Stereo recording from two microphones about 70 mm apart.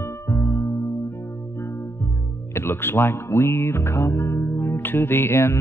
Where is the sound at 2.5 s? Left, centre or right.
Left.